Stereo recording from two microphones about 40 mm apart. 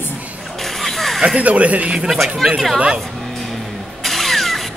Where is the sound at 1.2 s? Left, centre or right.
Right.